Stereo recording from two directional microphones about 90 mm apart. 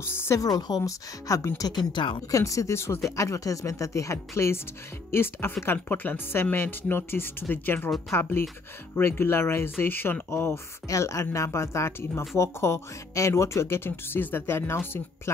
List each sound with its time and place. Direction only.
0.0 s speech: 30° left (ahead or behind)
0.5 s speech: 45° left (ahead or behind)
1.6 s speech: 55° left (ahead or behind)
2.3 s speech: 35° left (ahead or behind)